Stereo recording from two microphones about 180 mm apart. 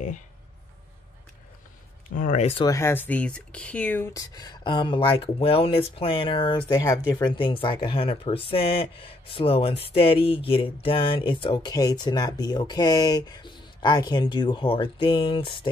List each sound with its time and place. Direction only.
2.1 s speech: 45° left (ahead or behind)
2.6 s speech: 15° left (ahead or behind)